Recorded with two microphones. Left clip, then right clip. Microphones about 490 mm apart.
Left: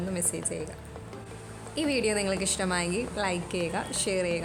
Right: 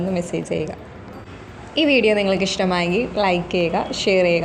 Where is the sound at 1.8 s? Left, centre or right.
Left.